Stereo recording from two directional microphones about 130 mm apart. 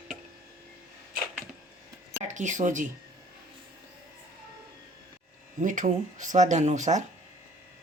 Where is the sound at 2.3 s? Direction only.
70° right (ahead or behind).